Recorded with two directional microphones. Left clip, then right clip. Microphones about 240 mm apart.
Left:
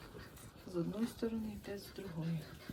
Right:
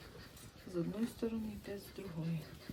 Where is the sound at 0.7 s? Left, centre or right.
Centre.